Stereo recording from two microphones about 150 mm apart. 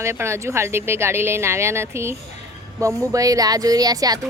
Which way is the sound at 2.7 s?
20° right (ahead or behind).